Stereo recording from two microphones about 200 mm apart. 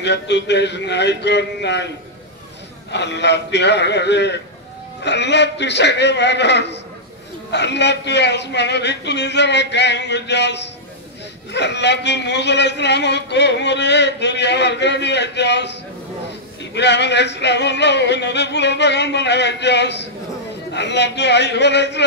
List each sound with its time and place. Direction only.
0.0 s speech: 60° left (ahead or behind)
2.9 s speech: 60° left (ahead or behind)
16.7 s speech: 60° left (ahead or behind)